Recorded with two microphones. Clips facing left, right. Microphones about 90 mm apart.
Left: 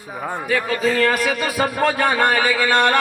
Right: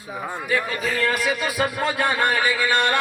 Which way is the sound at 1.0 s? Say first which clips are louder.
Left 4 dB; 85° left.